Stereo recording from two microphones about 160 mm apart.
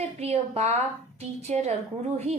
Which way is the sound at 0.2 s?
40° right (ahead or behind).